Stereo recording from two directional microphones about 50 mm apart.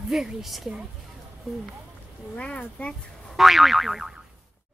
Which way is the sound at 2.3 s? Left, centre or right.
Left.